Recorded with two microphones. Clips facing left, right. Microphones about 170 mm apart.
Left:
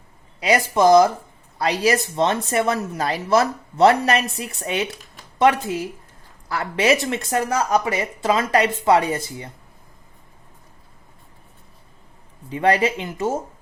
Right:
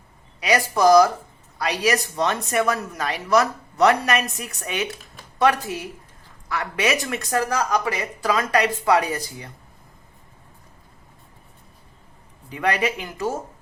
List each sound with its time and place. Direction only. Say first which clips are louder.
0.3 s speech: left 2 dB; 30° left (ahead or behind)
6.5 s speech: left 4 dB; 30° left (ahead or behind)
12.5 s speech: left 4 dB; 30° left (ahead or behind)